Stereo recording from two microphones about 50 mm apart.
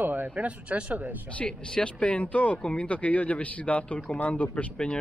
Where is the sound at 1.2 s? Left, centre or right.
Left.